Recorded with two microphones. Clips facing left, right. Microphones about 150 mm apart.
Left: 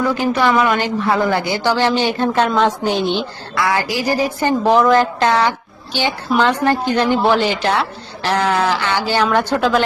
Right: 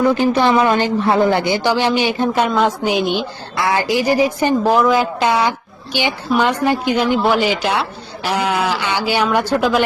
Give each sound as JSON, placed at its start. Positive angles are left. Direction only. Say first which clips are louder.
{"t": 0.0, "sound": "speech", "louder": "right 2 dB", "side_deg": -30}
{"t": 3.5, "sound": "speech", "louder": "right 2 dB", "side_deg": -25}
{"t": 4.6, "sound": "speech", "louder": "left 4 dB", "side_deg": -5}